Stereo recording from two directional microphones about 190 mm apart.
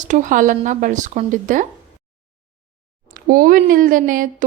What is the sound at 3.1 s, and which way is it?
Speech, 45° right (ahead or behind).